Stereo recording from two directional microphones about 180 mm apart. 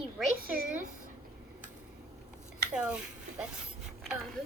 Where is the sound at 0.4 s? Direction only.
55° right (ahead or behind).